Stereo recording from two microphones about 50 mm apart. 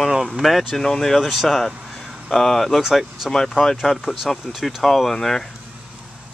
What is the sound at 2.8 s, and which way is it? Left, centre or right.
Speech, centre.